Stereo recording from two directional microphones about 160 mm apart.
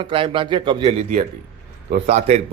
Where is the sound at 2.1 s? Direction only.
40° right (ahead or behind).